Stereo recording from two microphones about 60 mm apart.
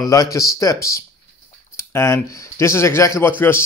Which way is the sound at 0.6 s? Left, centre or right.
Left.